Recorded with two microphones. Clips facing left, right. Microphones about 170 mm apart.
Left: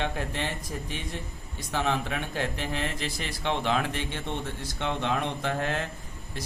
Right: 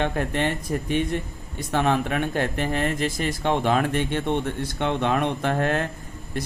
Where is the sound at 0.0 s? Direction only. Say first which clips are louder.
Right 7 dB; 60° right (ahead or behind).